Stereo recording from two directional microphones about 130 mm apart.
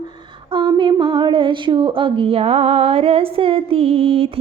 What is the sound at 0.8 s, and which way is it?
Speech, 40° right (ahead or behind).